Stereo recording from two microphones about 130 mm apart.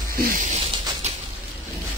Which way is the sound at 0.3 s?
80° right.